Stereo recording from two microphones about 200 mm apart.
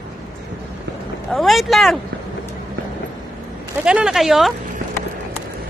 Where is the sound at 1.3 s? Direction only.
Centre (ahead or behind).